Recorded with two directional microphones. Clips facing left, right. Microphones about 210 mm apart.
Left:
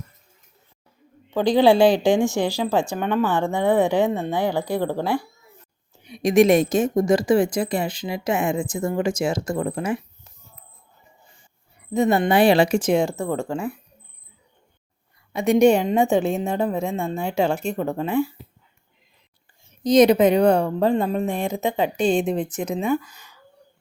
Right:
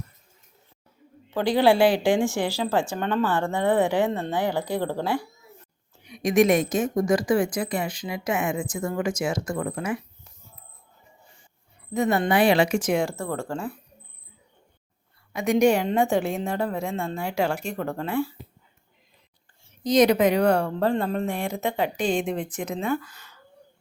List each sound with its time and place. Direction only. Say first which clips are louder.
1.3 s speech: left 4 dB; 15° left (ahead or behind)
6.1 s a woman's voice: left 4 dB; 30° left (ahead or behind)
11.9 s a woman's voice: left 4 dB; 25° left (ahead or behind)
15.3 s a woman's voice: left 4 dB; 25° left (ahead or behind)
19.8 s a woman's voice: left 4 dB; 20° left (ahead or behind)